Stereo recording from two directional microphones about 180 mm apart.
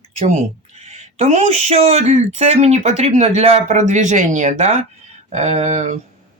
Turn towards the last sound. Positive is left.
turn(degrees=-40)  # may be behind; listen again after turning